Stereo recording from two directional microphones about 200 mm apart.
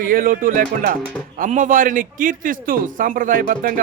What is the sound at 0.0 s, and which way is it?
Speech, 45° right (ahead or behind).